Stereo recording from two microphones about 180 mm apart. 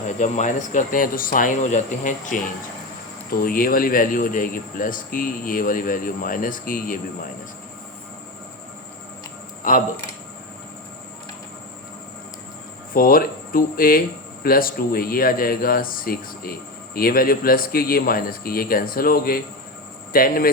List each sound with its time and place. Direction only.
0.2 s a man's voice: 45° left (ahead or behind)
9.6 s a man's voice: 50° left (ahead or behind)
12.9 s a man's voice: 55° left (ahead or behind)